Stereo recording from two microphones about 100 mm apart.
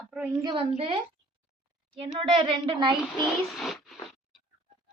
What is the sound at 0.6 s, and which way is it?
A woman's voice, 70° right (ahead or behind).